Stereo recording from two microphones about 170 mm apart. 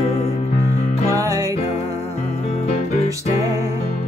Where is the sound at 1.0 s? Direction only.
20° right (ahead or behind).